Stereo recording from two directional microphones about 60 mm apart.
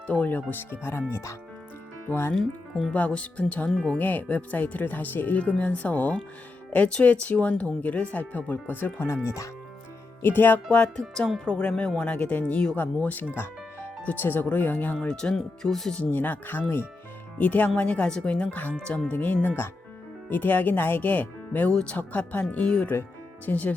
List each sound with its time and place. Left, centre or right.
0.1 s speech: left
1.1 s speech: left
2.4 s speech: centre
2.9 s speech: left
9.2 s speech: left
10.2 s speech: left
11.4 s speech: centre
14.9 s speech: centre
16.0 s speech: left
19.1 s speech: left
21.7 s speech: centre
21.9 s speech: left
22.4 s speech: centre